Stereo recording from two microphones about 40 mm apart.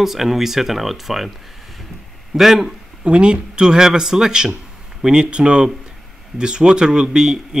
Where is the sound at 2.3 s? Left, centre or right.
Centre.